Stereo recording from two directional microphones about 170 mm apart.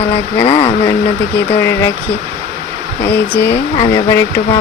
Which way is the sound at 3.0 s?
15° left (ahead or behind).